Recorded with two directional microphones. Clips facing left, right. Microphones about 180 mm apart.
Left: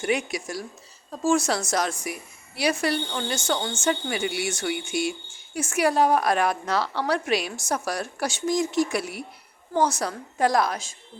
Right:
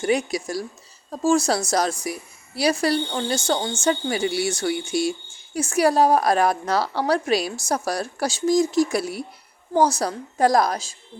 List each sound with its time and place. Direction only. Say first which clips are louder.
0.0 s speech: right 4 dB; 35° right (ahead or behind)